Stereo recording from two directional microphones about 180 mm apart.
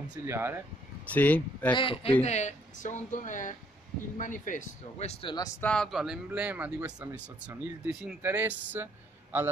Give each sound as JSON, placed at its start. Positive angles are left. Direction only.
{"t": 0.1, "sound": "speech", "side_deg": -15}
{"t": 1.1, "sound": "speech", "side_deg": 10}
{"t": 1.7, "sound": "a man's voice", "side_deg": 30}
{"t": 2.2, "sound": "speech", "side_deg": 40}
{"t": 5.3, "sound": "speech", "side_deg": 20}
{"t": 5.7, "sound": "speech", "side_deg": 0}